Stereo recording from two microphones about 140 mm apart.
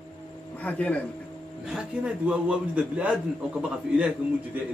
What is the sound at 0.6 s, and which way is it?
Speech, 10° left (ahead or behind).